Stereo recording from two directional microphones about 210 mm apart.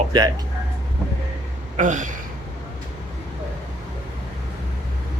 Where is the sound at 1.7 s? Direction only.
35° right (ahead or behind).